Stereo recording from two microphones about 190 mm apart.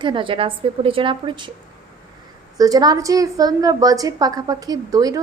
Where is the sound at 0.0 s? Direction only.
25° right (ahead or behind).